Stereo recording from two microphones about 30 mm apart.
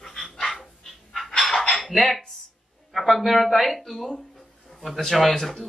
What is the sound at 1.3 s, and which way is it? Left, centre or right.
Dishes, centre.